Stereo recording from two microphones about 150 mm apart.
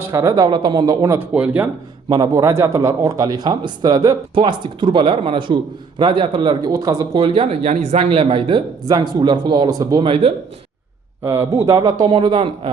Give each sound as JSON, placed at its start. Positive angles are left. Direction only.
{"t": 0.0, "sound": "a man's voice", "side_deg": -20}
{"t": 2.0, "sound": "a man's voice", "side_deg": -30}
{"t": 7.2, "sound": "speech", "side_deg": -40}
{"t": 10.0, "sound": "speech", "side_deg": -40}
{"t": 11.2, "sound": "a man's voice", "side_deg": -15}